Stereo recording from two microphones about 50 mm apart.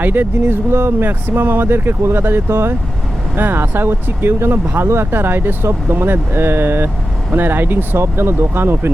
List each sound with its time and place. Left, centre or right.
0.0 s speech: right
3.3 s speech: right
8.0 s speech: right